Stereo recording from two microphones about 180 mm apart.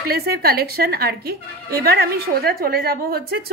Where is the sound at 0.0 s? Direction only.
60° right (ahead or behind).